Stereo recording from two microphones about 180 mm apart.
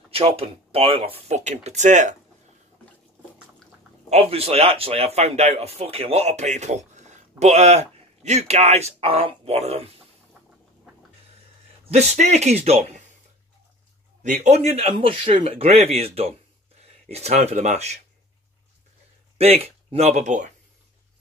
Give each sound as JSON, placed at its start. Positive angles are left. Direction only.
{"t": 0.1, "sound": "speech", "side_deg": -30}
{"t": 4.1, "sound": "speech", "side_deg": -35}
{"t": 11.8, "sound": "speech", "side_deg": -35}
{"t": 14.2, "sound": "speech", "side_deg": -40}
{"t": 16.8, "sound": "a sound", "side_deg": -35}
{"t": 17.4, "sound": "speech", "side_deg": -40}
{"t": 19.3, "sound": "speech", "side_deg": -35}